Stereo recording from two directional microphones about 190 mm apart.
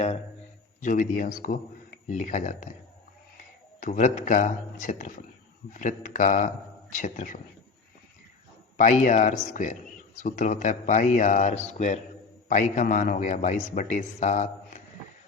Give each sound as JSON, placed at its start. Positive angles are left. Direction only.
{"t": 0.8, "sound": "a man's voice", "side_deg": 45}
{"t": 3.8, "sound": "a man's voice", "side_deg": 40}
{"t": 8.8, "sound": "a man's voice", "side_deg": 40}